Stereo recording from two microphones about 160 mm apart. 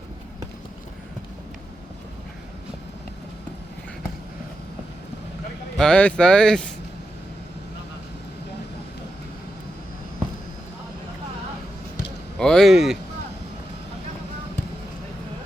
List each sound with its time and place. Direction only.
5.7 s speech: 5° left (ahead or behind)
12.4 s speech: 5° left (ahead or behind)